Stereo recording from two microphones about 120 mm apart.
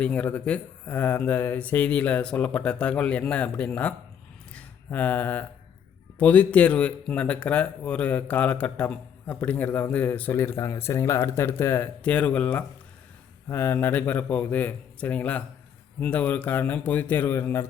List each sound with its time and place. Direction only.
0.0 s speech: 10° left (ahead or behind)
4.5 s a sound: 15° left (ahead or behind)
6.1 s speech: 10° left (ahead or behind)